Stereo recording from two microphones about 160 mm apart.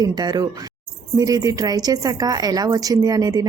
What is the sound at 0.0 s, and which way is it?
A woman's voice, 25° right (ahead or behind).